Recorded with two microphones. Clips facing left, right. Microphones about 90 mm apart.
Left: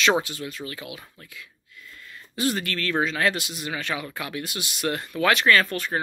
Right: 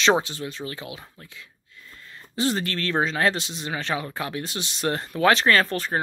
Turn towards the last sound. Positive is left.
turn(degrees=-30)  # may be behind; listen again after turning